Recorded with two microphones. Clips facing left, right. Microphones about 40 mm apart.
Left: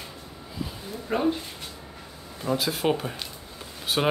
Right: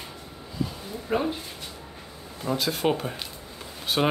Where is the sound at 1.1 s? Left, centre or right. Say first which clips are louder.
Right 1 dB; centre.